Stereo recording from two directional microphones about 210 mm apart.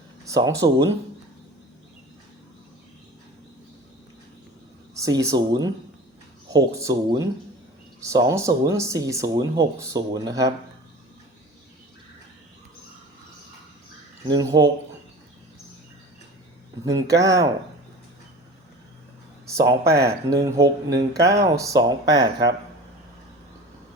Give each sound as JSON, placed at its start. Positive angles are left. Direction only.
{"t": 0.3, "sound": "speech", "side_deg": -15}
{"t": 4.9, "sound": "speech", "side_deg": -15}
{"t": 14.3, "sound": "speech", "side_deg": -20}
{"t": 16.8, "sound": "speech", "side_deg": -15}
{"t": 19.5, "sound": "speech", "side_deg": -15}